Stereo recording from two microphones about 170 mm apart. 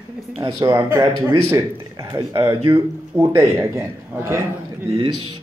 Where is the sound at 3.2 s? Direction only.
15° right (ahead or behind).